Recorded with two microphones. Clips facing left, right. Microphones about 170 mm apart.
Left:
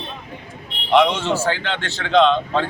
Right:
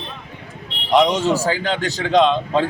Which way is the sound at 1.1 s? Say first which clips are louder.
Right 2 dB; 35° right (ahead or behind).